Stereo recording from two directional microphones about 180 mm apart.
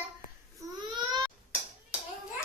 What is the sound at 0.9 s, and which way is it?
Baby cry, 25° right (ahead or behind).